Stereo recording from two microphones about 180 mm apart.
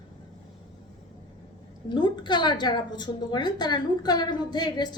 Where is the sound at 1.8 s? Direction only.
25° left (ahead or behind).